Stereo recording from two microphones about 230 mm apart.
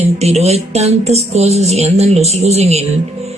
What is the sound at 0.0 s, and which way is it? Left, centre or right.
Speech, right.